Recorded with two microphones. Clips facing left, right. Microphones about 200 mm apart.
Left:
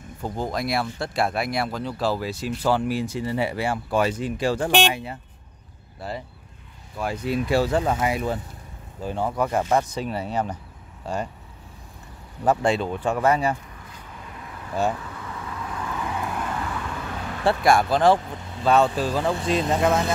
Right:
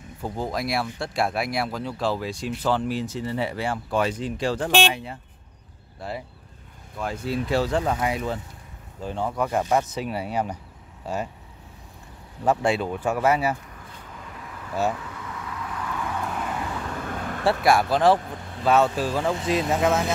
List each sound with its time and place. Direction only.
0.2 s speech: centre (ahead or behind)
7.0 s speech: 15° left (ahead or behind)
9.5 s speech: 10° right (ahead or behind)
12.4 s speech: 5° right (ahead or behind)
15.8 s vehicle: 20° left (ahead or behind)
16.5 s vehicle: 25° right (ahead or behind)
16.8 s vehicle: 45° right (ahead or behind)
17.5 s speech: centre (ahead or behind)